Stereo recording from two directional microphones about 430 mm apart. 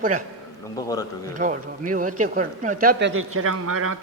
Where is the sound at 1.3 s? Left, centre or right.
Centre.